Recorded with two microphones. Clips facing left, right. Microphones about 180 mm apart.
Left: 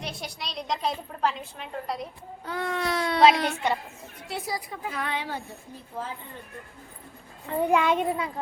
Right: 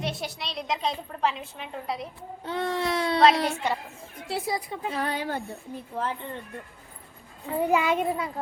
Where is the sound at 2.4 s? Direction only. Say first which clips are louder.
Right 2 dB; 25° right (ahead or behind).